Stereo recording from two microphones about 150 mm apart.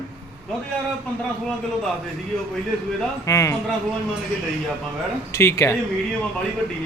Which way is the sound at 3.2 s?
20° left (ahead or behind).